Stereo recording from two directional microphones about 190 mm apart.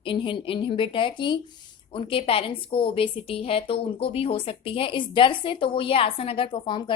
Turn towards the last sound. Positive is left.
turn(degrees=25)  # may be behind; listen again after turning